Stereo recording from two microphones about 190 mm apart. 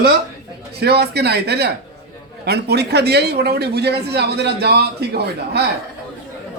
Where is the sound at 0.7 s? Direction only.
60° right (ahead or behind).